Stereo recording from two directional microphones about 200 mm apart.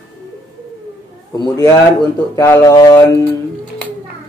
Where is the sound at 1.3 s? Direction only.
15° left (ahead or behind).